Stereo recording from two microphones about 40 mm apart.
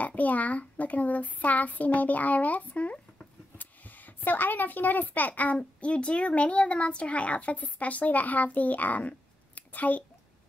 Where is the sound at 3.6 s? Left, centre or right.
Left.